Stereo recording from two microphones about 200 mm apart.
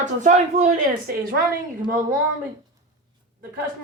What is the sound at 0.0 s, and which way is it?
Speech, 35° right (ahead or behind).